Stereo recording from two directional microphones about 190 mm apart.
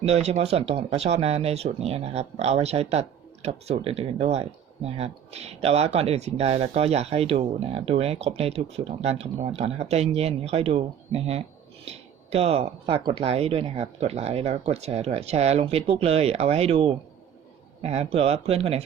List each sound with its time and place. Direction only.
0.0 s speech: 35° right (ahead or behind)